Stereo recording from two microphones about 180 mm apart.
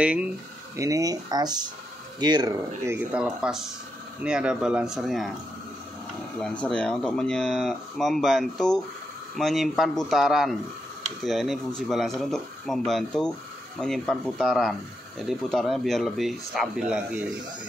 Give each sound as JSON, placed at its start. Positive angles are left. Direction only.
{"t": 0.0, "sound": "speech", "side_deg": -5}
{"t": 0.7, "sound": "speech", "side_deg": -20}
{"t": 6.6, "sound": "speech", "side_deg": 5}